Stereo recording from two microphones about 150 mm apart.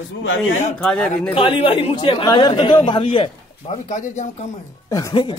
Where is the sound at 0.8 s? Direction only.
5° left (ahead or behind).